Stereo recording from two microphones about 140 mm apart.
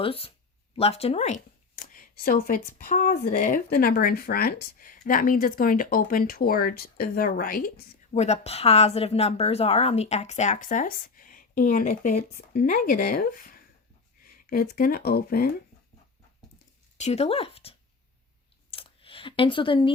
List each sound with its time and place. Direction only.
0.0 s a woman's voice: 40° left (ahead or behind)
1.7 s speech: 75° left (ahead or behind)
8.1 s a woman's voice: 50° left (ahead or behind); by 11.9 s 80° left
11.9 s speech: 65° left (ahead or behind); by 15.5 s 90° left
17.0 s speech: 50° left (ahead or behind)
18.7 s a sound: 40° left (ahead or behind)